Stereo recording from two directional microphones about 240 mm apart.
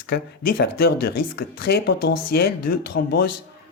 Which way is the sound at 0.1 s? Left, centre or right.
Left.